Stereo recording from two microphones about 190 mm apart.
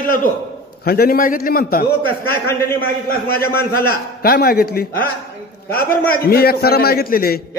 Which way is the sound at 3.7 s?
55° left (ahead or behind).